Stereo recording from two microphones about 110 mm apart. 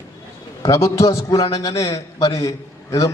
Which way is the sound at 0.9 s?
30° left (ahead or behind).